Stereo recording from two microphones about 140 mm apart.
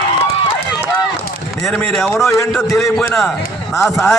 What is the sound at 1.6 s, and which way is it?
A man's voice, centre (ahead or behind).